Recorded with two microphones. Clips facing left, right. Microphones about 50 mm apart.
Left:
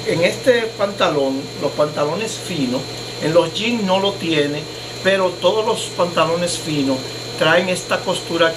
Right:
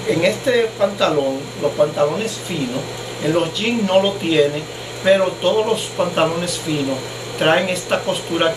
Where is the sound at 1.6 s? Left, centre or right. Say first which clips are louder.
Right 2 dB; right.